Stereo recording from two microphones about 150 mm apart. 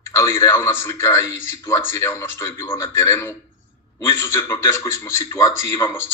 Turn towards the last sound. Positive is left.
turn(degrees=20)  # may be behind; listen again after turning